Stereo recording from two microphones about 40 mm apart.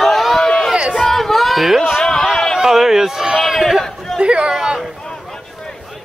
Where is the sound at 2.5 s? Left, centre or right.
Centre.